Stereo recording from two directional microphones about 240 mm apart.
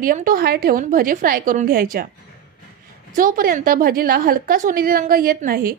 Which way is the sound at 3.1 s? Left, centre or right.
Right.